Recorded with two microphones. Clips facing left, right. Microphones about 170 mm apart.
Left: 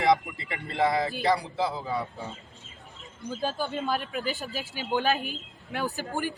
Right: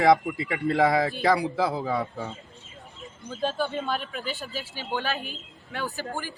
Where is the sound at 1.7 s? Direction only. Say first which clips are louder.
Right 4 dB; 75° right (ahead or behind).